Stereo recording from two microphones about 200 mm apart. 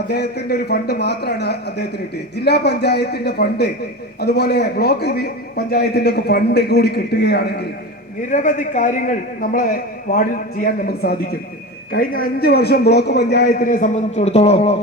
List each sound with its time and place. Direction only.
0.1 s speech: 55° left (ahead or behind)
8.3 s a man's voice: 40° left (ahead or behind)